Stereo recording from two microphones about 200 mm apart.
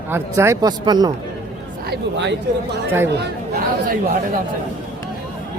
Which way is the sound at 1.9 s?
60° right (ahead or behind).